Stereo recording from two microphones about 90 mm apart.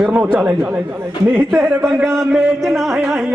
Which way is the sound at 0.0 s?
25° right (ahead or behind).